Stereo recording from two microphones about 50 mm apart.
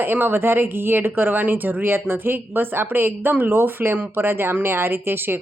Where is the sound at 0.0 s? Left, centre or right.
Right.